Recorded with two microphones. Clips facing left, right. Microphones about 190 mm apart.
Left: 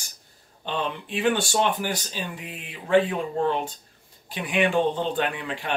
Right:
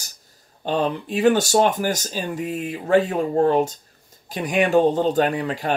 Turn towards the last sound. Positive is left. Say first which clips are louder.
# right 7 dB
turn(degrees=-40)  # may be behind; listen again after turning